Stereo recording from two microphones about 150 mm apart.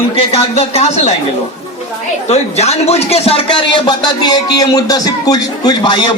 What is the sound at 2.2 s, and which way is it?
Speech, 45° left (ahead or behind).